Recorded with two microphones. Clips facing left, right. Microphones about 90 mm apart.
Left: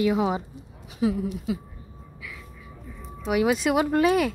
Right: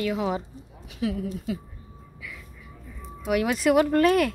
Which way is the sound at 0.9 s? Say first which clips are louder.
Left 4 dB; 25° left (ahead or behind).